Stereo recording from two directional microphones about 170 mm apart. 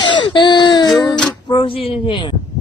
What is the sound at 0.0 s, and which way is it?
Baby cry, 30° left (ahead or behind).